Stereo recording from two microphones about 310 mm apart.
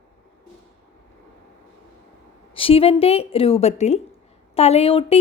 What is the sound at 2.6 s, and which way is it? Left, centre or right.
A woman's voice, centre.